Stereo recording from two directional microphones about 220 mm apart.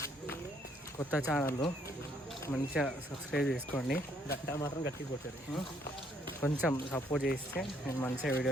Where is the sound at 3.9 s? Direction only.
45° left (ahead or behind).